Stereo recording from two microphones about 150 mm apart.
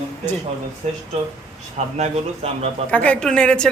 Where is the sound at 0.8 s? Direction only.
55° right (ahead or behind).